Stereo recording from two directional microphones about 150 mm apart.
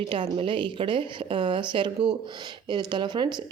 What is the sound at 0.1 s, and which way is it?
Speech, 35° right (ahead or behind).